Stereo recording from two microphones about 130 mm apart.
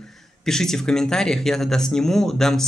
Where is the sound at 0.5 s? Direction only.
5° left (ahead or behind).